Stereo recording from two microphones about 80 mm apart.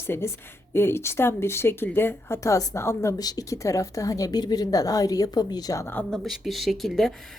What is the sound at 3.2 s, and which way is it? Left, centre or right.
A woman's voice, left.